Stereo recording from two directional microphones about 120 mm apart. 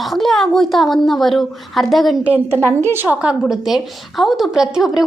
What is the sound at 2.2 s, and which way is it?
A woman's voice, 10° right (ahead or behind).